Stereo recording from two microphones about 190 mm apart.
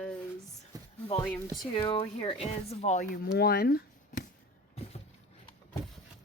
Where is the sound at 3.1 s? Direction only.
55° left (ahead or behind).